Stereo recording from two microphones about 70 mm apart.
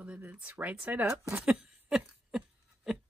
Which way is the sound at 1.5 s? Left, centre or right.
Centre.